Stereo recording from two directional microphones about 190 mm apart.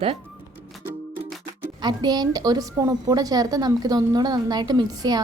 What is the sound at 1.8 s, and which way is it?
A woman's voice, 20° right (ahead or behind).